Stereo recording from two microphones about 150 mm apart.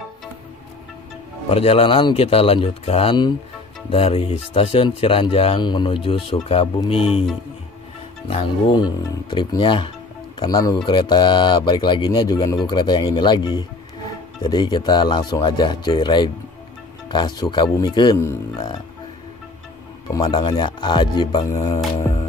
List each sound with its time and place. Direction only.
1.5 s speech: 40° left (ahead or behind)
8.3 s speech: 35° left (ahead or behind)
18.1 s speech: 20° left (ahead or behind)
20.1 s speech: 25° left (ahead or behind)